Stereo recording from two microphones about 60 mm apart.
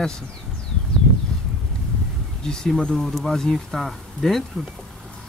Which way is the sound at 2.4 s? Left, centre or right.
Centre.